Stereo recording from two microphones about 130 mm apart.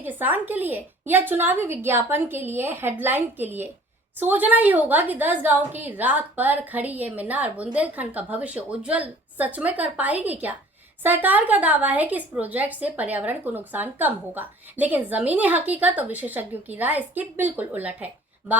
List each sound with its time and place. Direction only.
0.0 s a woman's voice: 15° right (ahead or behind)